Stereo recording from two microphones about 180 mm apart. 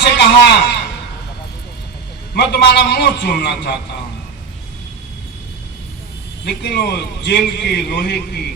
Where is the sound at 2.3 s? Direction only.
60° left (ahead or behind).